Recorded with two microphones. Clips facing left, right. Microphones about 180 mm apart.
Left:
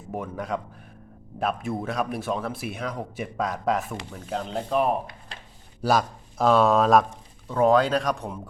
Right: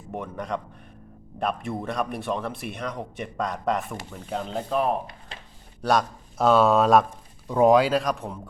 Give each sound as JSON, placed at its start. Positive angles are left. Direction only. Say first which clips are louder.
{"t": 0.1, "sound": "speech", "louder": "left 1 dB", "side_deg": 5}
{"t": 7.4, "sound": "speech", "louder": "right 2 dB", "side_deg": -15}